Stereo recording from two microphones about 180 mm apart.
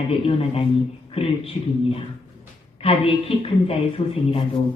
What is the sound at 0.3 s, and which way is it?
Speech, 30° left (ahead or behind).